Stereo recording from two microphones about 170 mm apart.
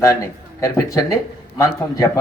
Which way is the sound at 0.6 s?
20° left (ahead or behind).